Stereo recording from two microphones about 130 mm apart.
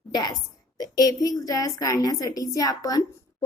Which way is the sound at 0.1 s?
30° left (ahead or behind).